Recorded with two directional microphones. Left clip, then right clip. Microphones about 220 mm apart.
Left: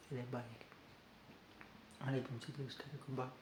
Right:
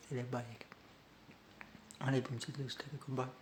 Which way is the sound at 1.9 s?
45° right (ahead or behind).